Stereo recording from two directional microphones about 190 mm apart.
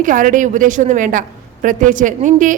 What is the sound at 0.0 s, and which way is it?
A woman's voice, 45° right (ahead or behind).